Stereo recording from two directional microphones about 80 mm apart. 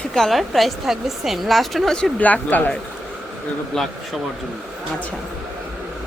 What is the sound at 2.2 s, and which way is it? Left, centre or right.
Speech, centre.